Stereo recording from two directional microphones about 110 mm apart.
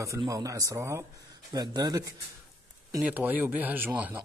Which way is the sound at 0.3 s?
30° right (ahead or behind).